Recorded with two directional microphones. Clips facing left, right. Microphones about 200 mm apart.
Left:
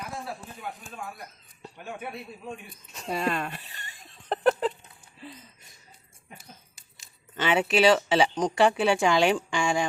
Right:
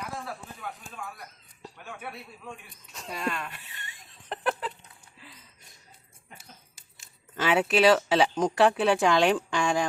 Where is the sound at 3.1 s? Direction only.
35° left (ahead or behind).